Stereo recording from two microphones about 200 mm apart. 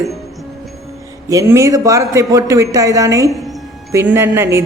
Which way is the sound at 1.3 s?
15° right (ahead or behind).